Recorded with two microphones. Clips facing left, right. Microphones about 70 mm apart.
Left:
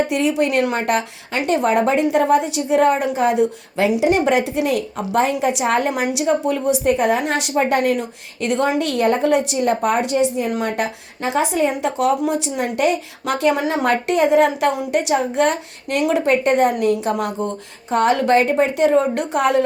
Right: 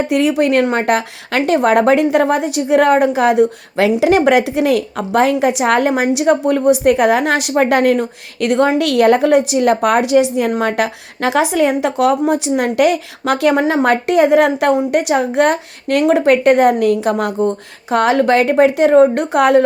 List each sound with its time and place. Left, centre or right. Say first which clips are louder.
0.1 s speech: right 5 dB; right
8.9 s a woman's voice: right 7 dB; right